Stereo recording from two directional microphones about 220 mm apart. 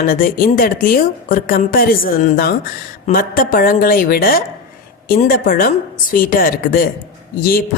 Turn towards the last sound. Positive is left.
turn(degrees=40)  # may be behind; listen again after turning